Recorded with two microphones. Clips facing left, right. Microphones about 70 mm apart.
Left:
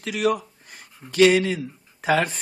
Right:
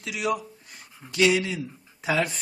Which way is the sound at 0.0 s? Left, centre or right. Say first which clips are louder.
Left 5 dB; left.